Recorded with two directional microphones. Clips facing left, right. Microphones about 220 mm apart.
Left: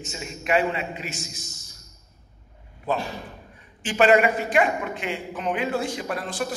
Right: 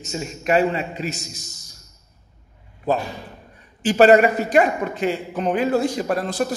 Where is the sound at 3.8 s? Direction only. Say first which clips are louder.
Right 5 dB; 40° right (ahead or behind).